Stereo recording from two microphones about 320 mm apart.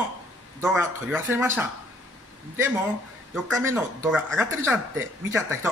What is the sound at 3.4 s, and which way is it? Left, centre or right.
Speech, centre.